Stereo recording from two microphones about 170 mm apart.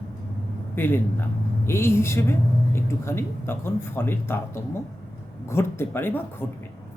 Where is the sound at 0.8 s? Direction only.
10° left (ahead or behind).